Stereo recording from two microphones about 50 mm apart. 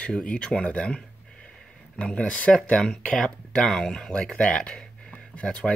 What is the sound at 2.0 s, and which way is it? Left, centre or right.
Speech, left.